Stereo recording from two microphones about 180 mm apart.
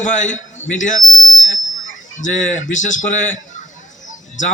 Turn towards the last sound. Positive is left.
turn(degrees=45)  # may be behind; listen again after turning